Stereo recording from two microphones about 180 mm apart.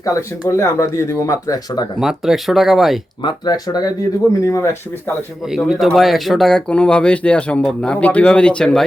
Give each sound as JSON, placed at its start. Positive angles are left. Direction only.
{"t": 0.0, "sound": "speech", "side_deg": 20}
{"t": 2.0, "sound": "speech", "side_deg": 0}
{"t": 3.2, "sound": "speech", "side_deg": 25}
{"t": 5.5, "sound": "speech", "side_deg": 0}